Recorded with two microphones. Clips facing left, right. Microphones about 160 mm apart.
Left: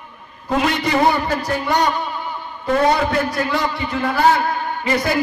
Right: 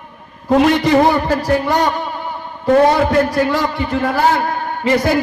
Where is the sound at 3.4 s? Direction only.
45° right (ahead or behind).